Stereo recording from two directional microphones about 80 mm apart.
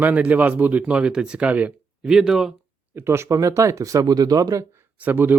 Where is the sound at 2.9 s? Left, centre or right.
Right.